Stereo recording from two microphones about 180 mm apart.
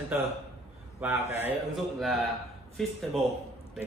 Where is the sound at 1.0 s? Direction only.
10° right (ahead or behind).